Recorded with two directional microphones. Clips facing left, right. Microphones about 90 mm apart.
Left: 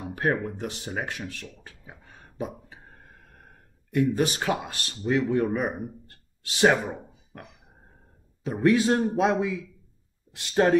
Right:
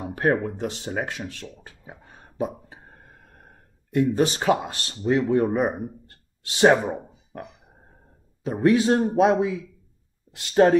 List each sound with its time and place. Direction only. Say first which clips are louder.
0.0 s speech: right 4 dB; 35° right (ahead or behind)
0.5 s speech: right 4 dB; 25° right (ahead or behind)
2.7 s a sound: right 2 dB; 30° right (ahead or behind)
5.1 s speech: right 3 dB; 35° right (ahead or behind)
8.6 s speech: right 2 dB; 25° right (ahead or behind)